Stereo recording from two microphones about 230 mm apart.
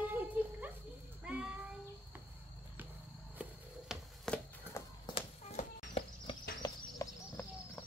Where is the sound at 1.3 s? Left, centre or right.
Centre.